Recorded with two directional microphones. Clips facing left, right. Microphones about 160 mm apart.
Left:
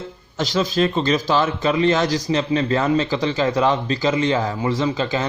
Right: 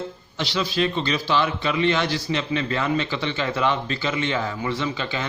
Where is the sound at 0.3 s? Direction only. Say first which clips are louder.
Left 5 dB; 45° left (ahead or behind).